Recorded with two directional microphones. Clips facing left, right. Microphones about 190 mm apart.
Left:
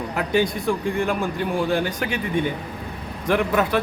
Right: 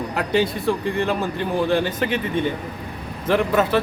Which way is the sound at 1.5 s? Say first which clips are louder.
Right 3 dB; 10° left (ahead or behind).